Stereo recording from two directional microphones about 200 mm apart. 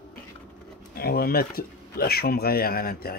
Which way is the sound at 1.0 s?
50° left (ahead or behind).